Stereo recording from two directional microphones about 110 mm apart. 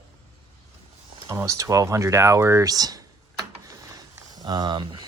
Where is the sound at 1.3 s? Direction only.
30° right (ahead or behind).